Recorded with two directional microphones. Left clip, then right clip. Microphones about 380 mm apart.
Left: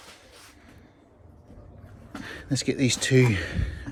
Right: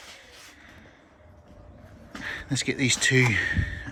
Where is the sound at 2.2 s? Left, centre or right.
Centre.